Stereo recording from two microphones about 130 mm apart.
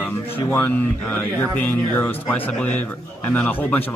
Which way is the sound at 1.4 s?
15° left (ahead or behind).